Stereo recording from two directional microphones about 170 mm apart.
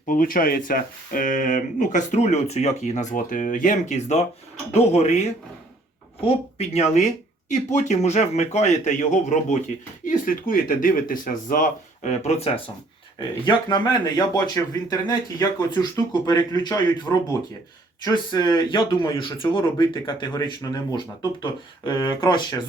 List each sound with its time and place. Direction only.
0.1 s speech: 55° left (ahead or behind); by 5.2 s 40° left (ahead or behind)
6.2 s speech: 40° left (ahead or behind)
13.4 s speech: 25° left (ahead or behind)